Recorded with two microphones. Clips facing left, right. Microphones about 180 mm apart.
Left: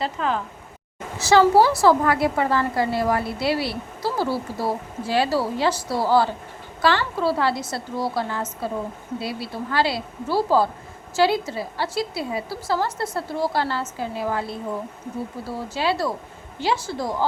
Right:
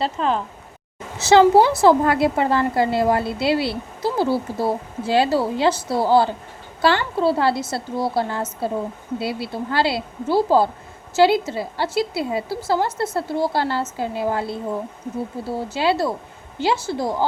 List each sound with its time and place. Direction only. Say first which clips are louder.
0.0 s a woman's voice: right 3 dB; 25° right (ahead or behind)